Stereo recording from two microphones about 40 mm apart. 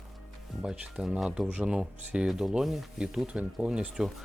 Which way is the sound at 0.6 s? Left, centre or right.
Right.